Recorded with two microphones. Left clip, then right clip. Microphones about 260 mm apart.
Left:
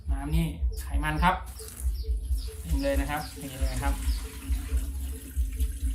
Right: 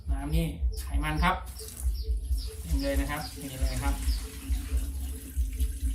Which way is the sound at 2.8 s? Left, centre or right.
Centre.